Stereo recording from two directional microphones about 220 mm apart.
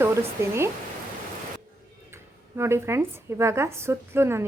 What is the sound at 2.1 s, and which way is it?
A woman's voice, 10° right (ahead or behind).